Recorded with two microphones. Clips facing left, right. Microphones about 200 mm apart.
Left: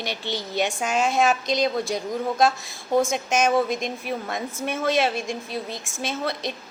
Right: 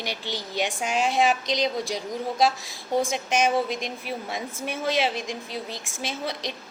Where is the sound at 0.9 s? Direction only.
50° left (ahead or behind).